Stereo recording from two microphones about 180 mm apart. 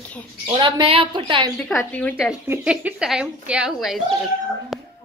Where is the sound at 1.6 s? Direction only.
Centre (ahead or behind).